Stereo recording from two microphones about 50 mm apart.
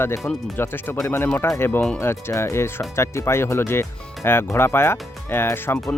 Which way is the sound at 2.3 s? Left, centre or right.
Left.